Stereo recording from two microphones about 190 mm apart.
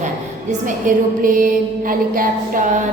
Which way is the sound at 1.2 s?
45° right (ahead or behind).